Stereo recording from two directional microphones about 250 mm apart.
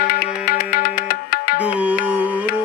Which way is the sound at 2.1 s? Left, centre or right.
Centre.